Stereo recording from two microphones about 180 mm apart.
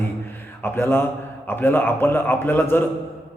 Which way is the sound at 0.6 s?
15° left (ahead or behind).